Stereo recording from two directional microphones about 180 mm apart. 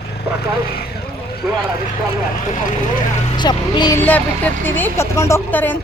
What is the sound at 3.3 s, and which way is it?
Speech, 25° left (ahead or behind).